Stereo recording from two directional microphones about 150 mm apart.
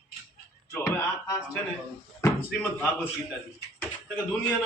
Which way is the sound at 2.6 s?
10° left (ahead or behind).